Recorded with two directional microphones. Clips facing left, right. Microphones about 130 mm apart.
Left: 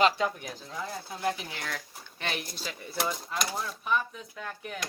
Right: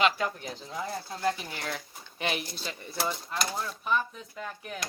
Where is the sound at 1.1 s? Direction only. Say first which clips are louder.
Right 1 dB; 15° left (ahead or behind).